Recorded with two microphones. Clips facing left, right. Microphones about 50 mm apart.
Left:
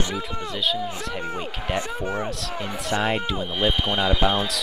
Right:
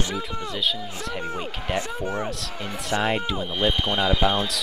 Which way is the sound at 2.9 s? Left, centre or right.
Centre.